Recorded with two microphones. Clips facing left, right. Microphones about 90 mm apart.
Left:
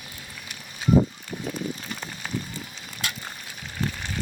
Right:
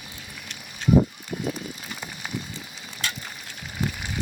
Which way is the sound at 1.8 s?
5° right (ahead or behind).